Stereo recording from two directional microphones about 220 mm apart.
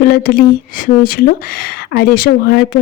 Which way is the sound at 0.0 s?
40° left (ahead or behind).